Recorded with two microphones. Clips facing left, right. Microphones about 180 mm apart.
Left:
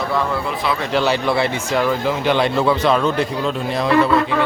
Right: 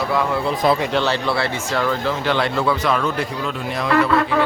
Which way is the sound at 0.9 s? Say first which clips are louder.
Left 2 dB; 10° left (ahead or behind).